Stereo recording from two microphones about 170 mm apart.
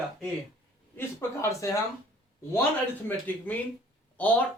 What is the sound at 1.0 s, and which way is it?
Speech, 15° left (ahead or behind).